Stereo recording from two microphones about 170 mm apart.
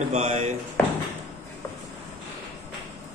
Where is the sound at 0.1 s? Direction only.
40° right (ahead or behind).